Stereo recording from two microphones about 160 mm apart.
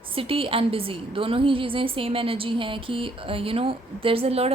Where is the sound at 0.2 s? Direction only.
35° right (ahead or behind).